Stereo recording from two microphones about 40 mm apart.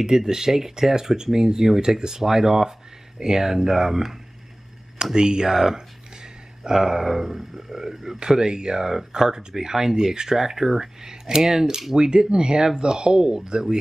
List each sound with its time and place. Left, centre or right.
0.0 s speech: centre